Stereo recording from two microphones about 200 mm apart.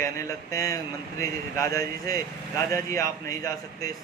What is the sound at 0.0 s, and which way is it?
Speech, 15° left (ahead or behind).